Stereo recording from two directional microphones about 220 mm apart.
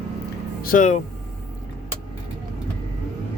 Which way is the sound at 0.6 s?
35° left (ahead or behind).